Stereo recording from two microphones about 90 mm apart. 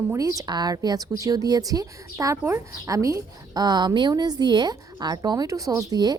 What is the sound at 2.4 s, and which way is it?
Speech, 25° right (ahead or behind).